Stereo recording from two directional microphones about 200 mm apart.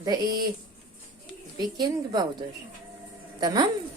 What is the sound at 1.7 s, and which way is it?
Speech, 20° right (ahead or behind).